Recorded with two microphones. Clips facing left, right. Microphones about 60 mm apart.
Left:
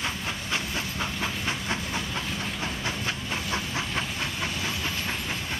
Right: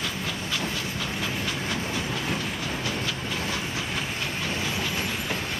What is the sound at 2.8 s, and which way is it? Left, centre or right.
Train, left.